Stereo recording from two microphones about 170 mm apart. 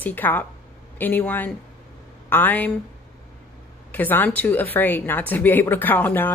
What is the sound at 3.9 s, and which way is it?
A woman's voice, 10° left (ahead or behind).